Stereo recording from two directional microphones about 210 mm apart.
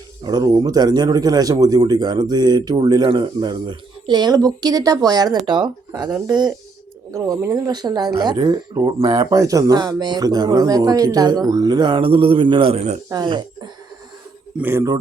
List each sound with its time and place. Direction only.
0.3 s speech: 20° right (ahead or behind)
13.1 s speech: 20° right (ahead or behind)